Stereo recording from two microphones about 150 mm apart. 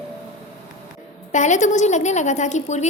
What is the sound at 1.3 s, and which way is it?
A woman's voice, 55° left (ahead or behind).